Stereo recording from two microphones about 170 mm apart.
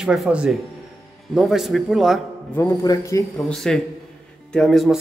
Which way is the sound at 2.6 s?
20° left (ahead or behind).